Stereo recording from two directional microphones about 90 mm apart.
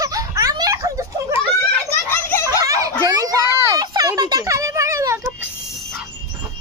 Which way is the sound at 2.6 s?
40° right (ahead or behind).